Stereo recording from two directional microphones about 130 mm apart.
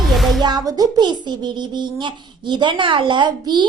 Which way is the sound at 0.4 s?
30° right (ahead or behind).